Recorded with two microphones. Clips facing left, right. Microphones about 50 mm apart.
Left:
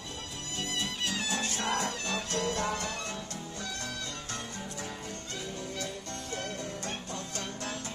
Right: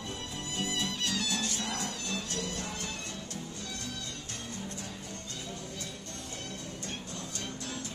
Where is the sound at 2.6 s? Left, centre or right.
Left.